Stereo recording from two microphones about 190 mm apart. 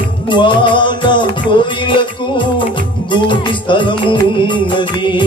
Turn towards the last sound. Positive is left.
turn(degrees=25)  # may be behind; listen again after turning